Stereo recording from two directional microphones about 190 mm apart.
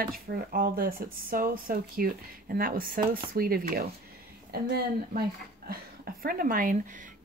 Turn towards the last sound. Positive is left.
turn(degrees=-45)  # may be behind; listen again after turning